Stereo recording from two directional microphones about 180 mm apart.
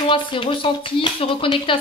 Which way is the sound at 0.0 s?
30° left (ahead or behind).